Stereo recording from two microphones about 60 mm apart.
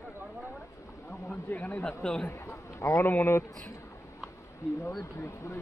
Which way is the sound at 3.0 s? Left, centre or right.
Left.